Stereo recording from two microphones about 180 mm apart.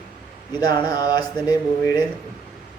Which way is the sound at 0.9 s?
20° left (ahead or behind).